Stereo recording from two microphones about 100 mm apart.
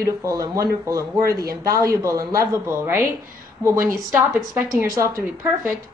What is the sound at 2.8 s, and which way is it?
Speech, 20° right (ahead or behind).